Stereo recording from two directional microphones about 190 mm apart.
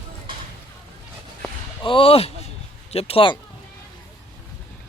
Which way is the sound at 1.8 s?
30° left (ahead or behind).